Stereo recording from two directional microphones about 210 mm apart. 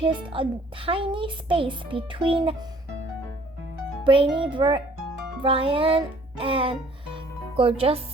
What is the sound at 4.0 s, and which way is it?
A child's voice, 25° right (ahead or behind).